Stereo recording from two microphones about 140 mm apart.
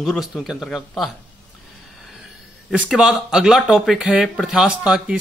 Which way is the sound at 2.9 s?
5° right (ahead or behind).